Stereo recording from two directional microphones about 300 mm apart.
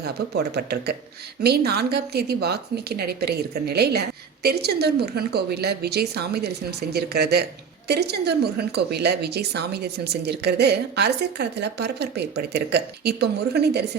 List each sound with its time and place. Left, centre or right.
0.0 s a woman's voice: right